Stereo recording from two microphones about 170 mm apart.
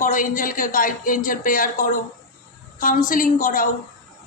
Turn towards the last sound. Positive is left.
turn(degrees=50)  # may be behind; listen again after turning